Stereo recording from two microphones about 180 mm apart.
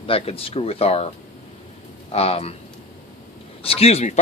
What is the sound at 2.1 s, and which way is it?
Speech, 35° left (ahead or behind).